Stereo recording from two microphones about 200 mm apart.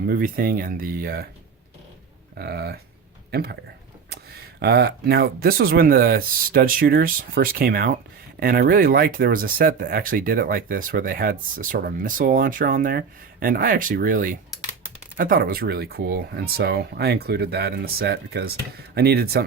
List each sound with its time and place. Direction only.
0.1 s speech: 45° right (ahead or behind)
2.4 s speech: 50° right (ahead or behind)
4.6 s speech: 55° right (ahead or behind)